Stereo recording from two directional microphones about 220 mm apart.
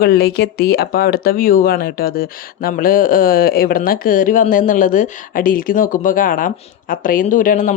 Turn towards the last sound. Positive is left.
turn(degrees=35)  # may be behind; listen again after turning